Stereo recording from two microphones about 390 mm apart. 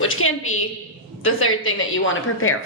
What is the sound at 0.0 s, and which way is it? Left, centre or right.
A woman's voice, left.